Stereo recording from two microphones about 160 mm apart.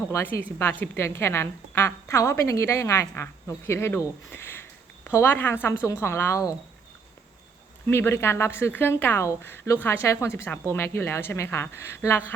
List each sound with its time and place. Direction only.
0.1 s a woman's voice: 15° left (ahead or behind)
7.9 s a woman's voice: 15° left (ahead or behind)